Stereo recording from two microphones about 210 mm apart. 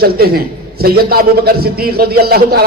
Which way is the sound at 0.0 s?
45° right (ahead or behind).